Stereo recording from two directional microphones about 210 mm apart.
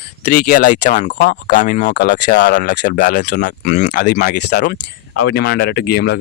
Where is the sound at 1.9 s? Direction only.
55° left (ahead or behind).